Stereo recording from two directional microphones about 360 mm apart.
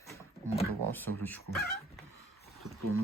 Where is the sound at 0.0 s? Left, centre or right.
Centre.